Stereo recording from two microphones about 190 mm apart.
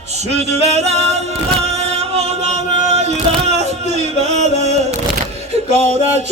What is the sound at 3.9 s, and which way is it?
Music, 35° right (ahead or behind).